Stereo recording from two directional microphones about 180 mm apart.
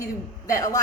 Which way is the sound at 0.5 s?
20° left (ahead or behind).